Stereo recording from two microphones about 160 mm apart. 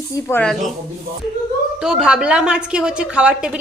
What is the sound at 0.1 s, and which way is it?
Speech, 15° left (ahead or behind).